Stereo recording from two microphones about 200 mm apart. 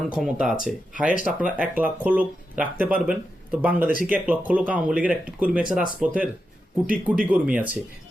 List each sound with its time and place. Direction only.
0.0 s speech: centre (ahead or behind)